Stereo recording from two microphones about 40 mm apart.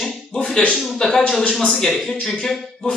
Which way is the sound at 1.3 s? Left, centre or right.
Centre.